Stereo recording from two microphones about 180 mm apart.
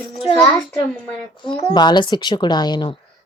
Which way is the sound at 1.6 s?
25° left (ahead or behind).